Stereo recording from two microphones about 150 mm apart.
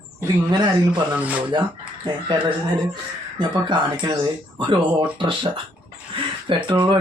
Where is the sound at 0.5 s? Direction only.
30° right (ahead or behind).